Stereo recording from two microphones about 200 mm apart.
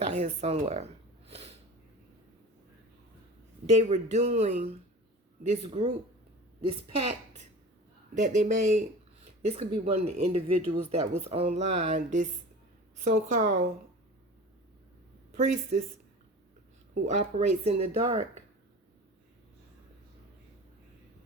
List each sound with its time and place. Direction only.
0.0 s speech: 35° right (ahead or behind)
1.3 s snort: 30° right (ahead or behind)
3.7 s speech: 35° right (ahead or behind)
15.4 s speech: 40° right (ahead or behind)
16.9 s speech: 35° right (ahead or behind)